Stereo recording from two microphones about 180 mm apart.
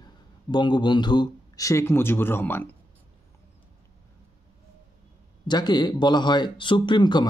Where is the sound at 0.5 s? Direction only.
25° left (ahead or behind).